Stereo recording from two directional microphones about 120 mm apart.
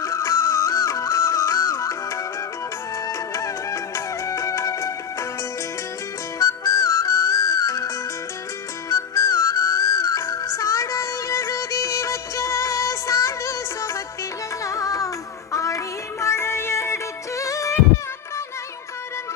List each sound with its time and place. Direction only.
0.0 s music: 25° left (ahead or behind)
6.4 s music: 25° left (ahead or behind)